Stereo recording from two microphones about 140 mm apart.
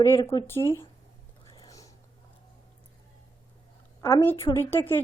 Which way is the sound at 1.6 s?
25° left (ahead or behind).